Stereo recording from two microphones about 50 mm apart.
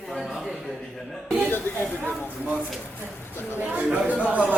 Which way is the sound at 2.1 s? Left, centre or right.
Left.